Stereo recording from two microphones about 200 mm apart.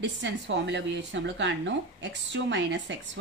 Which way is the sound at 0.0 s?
65° right (ahead or behind).